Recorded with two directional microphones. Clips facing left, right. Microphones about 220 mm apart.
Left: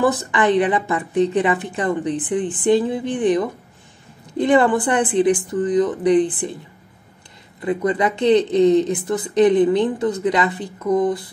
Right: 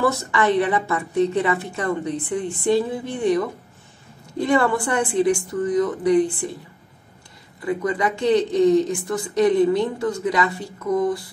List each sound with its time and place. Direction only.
0.0 s a woman's voice: 15° left (ahead or behind)
7.6 s speech: 20° left (ahead or behind)